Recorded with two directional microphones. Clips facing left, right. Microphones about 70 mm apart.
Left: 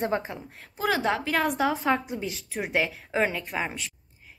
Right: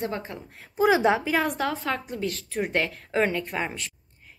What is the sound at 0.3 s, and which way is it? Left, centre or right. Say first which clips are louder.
Speech: even; centre.